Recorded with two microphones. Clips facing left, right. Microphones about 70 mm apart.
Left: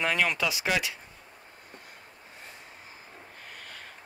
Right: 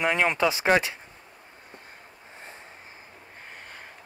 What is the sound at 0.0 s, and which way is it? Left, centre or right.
Speech, right.